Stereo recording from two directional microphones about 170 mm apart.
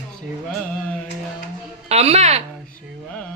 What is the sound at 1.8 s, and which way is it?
Speech, 40° right (ahead or behind).